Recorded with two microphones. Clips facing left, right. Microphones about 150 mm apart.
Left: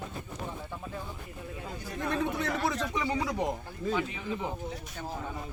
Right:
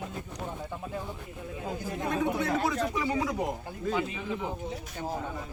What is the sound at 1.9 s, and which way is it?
Speech, 15° right (ahead or behind).